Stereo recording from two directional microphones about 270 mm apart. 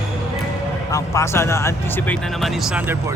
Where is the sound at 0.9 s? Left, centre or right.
Centre.